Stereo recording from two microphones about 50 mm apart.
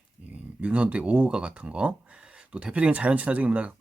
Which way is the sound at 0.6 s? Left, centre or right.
Right.